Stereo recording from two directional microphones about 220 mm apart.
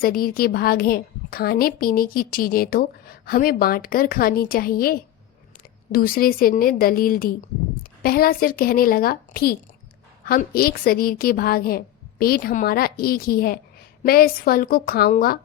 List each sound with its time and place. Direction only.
0.0 s a woman's voice: 40° left (ahead or behind)